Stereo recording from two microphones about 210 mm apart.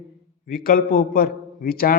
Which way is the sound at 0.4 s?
45° left (ahead or behind).